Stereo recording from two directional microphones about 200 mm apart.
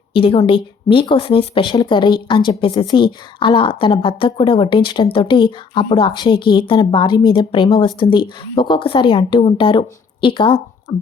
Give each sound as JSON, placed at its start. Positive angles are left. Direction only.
{"t": 0.1, "sound": "speech", "side_deg": 25}